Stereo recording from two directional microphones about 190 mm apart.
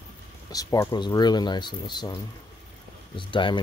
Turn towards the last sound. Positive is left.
turn(degrees=25)  # may be behind; listen again after turning